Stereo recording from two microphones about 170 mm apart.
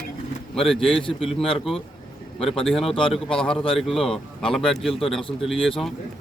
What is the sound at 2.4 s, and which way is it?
Speech, 35° left (ahead or behind).